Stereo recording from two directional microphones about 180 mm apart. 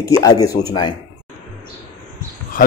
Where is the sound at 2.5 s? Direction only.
50° left (ahead or behind).